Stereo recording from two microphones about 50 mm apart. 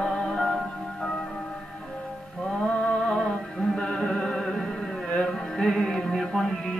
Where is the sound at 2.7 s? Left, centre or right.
Left.